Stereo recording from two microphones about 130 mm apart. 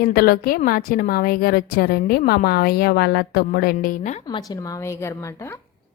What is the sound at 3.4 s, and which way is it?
Speech, 90° left.